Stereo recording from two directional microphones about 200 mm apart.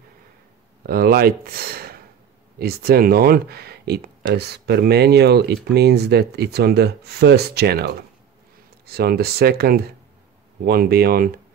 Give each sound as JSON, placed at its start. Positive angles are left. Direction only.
{"t": 0.8, "sound": "speech", "side_deg": -50}